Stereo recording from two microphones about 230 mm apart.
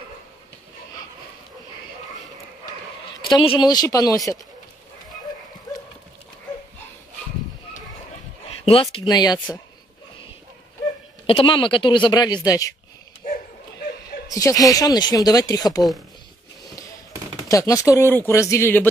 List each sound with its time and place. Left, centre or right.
3.3 s speech: centre
8.5 s speech: left
11.2 s speech: left
13.2 s dog: left
14.2 s speech: centre
17.5 s speech: centre